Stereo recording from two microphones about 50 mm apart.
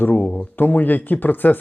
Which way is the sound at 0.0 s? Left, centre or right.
Left.